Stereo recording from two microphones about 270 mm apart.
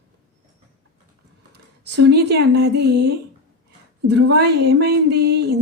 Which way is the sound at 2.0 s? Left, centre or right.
Right.